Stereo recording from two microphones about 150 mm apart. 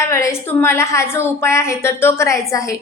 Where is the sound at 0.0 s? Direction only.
20° left (ahead or behind).